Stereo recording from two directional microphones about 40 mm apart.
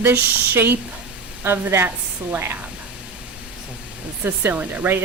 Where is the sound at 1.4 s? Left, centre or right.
Right.